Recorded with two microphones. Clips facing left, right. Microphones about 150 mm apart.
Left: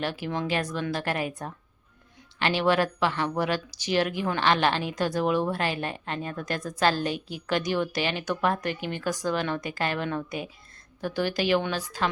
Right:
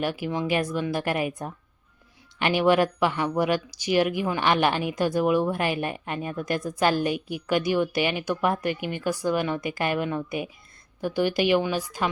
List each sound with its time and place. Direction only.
0.0 s speech: 10° right (ahead or behind)